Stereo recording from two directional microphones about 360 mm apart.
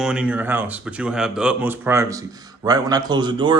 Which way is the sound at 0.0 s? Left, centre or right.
Centre.